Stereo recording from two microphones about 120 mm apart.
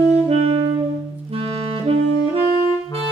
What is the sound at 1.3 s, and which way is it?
Clarinet, 50° right (ahead or behind).